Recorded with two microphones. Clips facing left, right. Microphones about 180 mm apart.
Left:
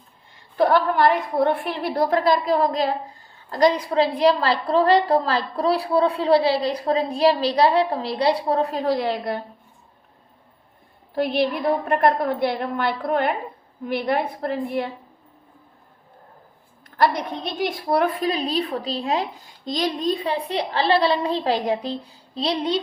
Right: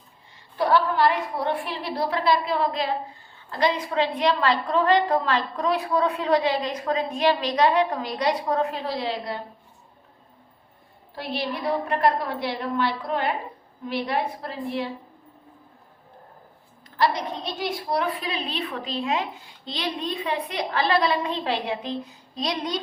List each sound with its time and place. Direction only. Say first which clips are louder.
0.5 s a woman's voice: left 3 dB; 55° left (ahead or behind)
11.1 s a woman's voice: left 8 dB; 55° left (ahead or behind)
17.0 s a woman's voice: left 3 dB; 50° left (ahead or behind); by 22.8 s 30° left (ahead or behind)